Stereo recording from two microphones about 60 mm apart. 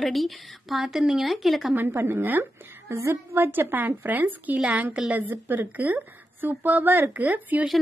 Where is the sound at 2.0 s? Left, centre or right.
Right.